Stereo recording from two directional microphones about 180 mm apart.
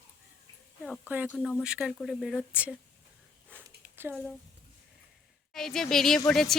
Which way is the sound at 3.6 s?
10° right (ahead or behind).